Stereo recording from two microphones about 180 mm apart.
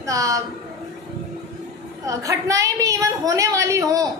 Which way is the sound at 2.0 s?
15° right (ahead or behind).